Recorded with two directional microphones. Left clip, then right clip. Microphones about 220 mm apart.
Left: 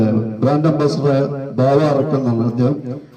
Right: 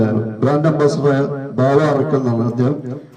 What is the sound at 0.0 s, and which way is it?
A man's voice, 25° left (ahead or behind).